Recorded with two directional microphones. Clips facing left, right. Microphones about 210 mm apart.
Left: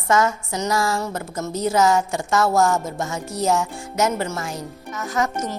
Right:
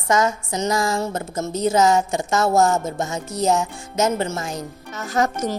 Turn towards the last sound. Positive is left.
turn(degrees=-30)  # may be behind; listen again after turning